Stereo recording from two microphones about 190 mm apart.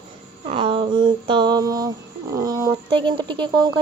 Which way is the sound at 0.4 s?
30° right (ahead or behind).